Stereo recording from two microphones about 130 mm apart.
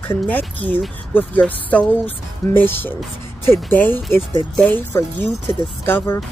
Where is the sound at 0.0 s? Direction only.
15° left (ahead or behind).